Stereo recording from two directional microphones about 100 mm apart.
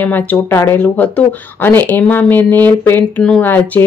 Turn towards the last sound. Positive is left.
turn(degrees=20)  # may be behind; listen again after turning